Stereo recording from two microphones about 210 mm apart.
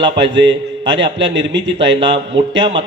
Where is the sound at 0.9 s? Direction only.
60° right (ahead or behind).